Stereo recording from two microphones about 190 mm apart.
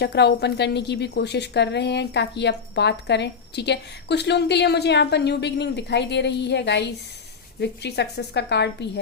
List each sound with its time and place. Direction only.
0.0 s a woman's voice: 60° left (ahead or behind)